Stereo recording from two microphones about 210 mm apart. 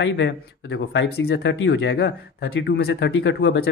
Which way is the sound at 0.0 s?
55° left (ahead or behind).